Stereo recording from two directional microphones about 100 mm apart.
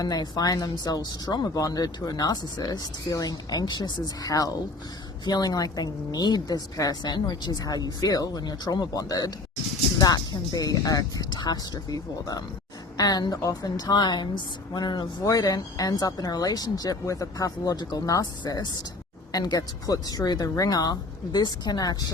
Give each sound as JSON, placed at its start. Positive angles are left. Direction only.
{"t": 0.0, "sound": "a woman's voice", "side_deg": 40}